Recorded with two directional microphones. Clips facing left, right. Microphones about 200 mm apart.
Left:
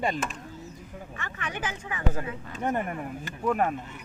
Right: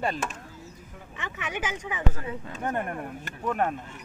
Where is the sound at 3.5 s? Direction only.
5° left (ahead or behind).